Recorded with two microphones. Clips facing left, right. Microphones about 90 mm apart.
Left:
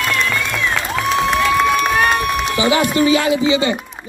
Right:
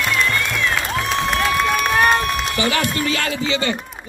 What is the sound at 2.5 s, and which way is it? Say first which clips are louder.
Speech: left 7 dB; 15° left (ahead or behind).